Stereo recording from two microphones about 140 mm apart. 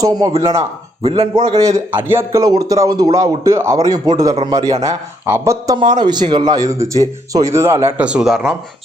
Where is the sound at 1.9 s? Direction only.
15° right (ahead or behind).